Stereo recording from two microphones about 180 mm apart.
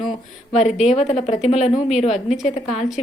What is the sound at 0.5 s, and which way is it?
A woman's voice, 40° left (ahead or behind).